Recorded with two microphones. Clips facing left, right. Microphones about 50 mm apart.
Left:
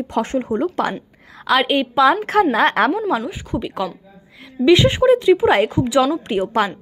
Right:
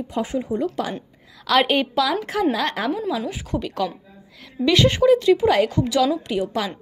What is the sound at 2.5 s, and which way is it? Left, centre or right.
Speech, left.